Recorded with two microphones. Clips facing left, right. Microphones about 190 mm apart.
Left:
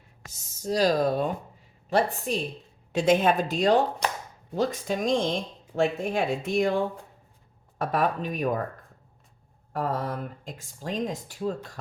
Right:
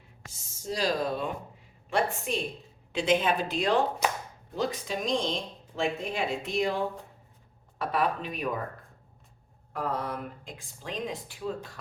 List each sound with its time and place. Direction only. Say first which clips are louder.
0.3 s speech: left 7 dB; 40° left (ahead or behind)
9.7 s speech: left 3 dB; 45° left (ahead or behind)